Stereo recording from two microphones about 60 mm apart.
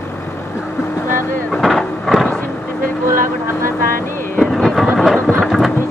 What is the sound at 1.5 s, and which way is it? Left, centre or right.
Vehicle, centre.